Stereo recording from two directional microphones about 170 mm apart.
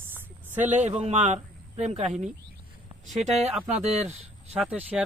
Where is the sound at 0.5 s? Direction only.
45° right (ahead or behind).